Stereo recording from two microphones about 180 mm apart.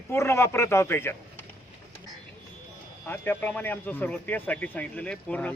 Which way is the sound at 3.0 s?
10° left (ahead or behind).